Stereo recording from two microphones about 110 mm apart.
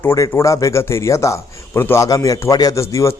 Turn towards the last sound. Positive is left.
turn(degrees=30)  # may be behind; listen again after turning